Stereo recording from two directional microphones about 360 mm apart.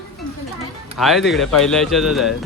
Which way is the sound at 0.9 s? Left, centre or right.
Centre.